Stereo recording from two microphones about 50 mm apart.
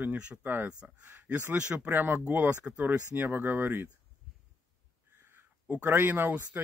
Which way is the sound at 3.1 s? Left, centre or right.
Right.